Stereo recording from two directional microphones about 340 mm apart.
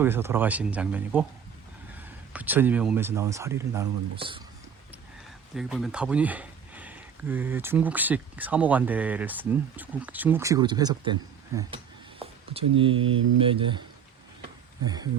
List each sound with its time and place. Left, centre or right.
0.0 s speech: centre
2.3 s speech: centre
5.5 s speech: centre
13.0 s mantra: right
13.4 s speech: centre
14.8 s speech: centre